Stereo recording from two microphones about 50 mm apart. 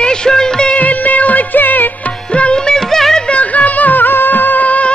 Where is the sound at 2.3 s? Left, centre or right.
Left.